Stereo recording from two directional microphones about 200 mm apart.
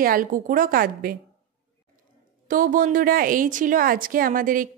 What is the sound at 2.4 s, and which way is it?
Speech, 45° right (ahead or behind).